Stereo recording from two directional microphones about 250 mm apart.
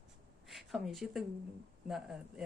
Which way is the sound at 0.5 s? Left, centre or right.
Centre.